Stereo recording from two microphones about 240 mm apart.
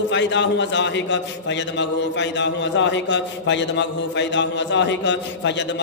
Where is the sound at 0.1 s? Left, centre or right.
Left.